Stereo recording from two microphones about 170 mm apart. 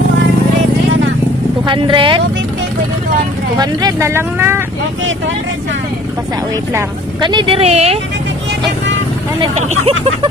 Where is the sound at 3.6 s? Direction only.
25° right (ahead or behind).